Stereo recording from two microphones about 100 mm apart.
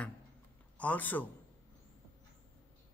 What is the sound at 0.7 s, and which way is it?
Speech, 15° left (ahead or behind).